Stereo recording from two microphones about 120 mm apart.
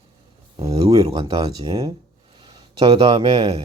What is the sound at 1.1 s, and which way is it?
Speech, 40° right (ahead or behind).